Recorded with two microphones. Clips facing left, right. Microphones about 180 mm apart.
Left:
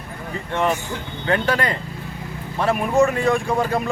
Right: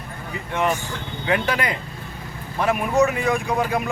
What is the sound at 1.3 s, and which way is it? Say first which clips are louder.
Speech: left 2 dB; 15° right (ahead or behind).